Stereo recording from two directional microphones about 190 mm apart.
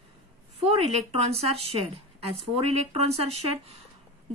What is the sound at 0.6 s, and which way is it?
Speech, 30° right (ahead or behind).